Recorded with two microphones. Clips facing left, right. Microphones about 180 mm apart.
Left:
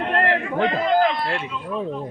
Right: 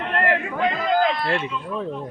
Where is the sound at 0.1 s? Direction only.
30° left (ahead or behind).